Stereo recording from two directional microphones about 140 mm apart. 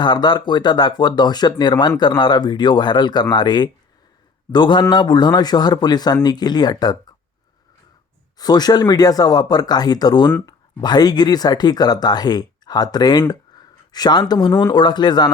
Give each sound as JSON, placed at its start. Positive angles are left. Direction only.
{"t": 0.0, "sound": "speech", "side_deg": 30}
{"t": 8.4, "sound": "speech", "side_deg": 30}